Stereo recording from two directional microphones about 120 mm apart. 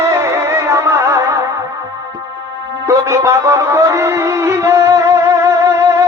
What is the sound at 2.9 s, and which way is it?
Music, 25° right (ahead or behind).